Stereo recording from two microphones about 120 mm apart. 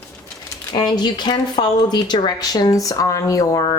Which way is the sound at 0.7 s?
35° left (ahead or behind).